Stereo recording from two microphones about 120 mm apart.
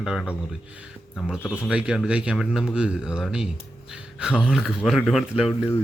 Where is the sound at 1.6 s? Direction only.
5° right (ahead or behind).